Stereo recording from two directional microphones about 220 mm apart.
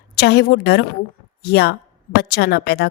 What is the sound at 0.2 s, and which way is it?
A woman's voice, 50° left (ahead or behind).